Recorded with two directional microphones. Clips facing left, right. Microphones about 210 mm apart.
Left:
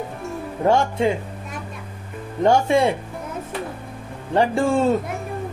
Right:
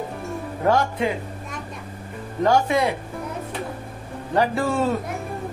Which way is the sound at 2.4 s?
25° left (ahead or behind).